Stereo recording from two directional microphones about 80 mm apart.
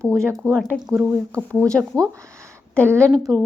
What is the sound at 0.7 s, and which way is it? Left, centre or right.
Speech, centre.